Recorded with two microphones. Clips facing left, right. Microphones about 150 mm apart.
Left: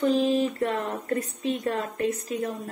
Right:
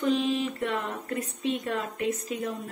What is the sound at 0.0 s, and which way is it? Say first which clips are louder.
A woman's voice: left 4 dB; 40° left (ahead or behind).